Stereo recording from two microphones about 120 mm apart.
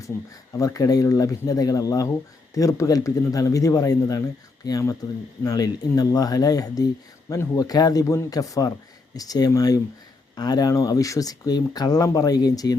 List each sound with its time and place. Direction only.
0.1 s speech: 25° left (ahead or behind)